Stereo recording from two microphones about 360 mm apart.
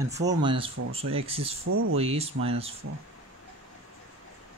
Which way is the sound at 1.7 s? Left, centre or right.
Right.